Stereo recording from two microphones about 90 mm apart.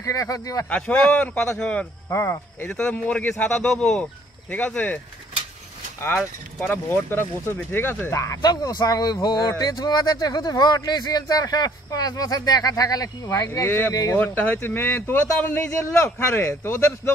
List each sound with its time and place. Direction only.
0.0 s speech: 40° left (ahead or behind)
0.7 s speech: 15° left (ahead or behind)
2.0 s speech: 30° left (ahead or behind)
2.7 s speech: 15° left (ahead or behind)
6.6 s speech: 20° left (ahead or behind)
8.4 s speech: 50° left (ahead or behind)
13.5 s speech: 25° left (ahead or behind)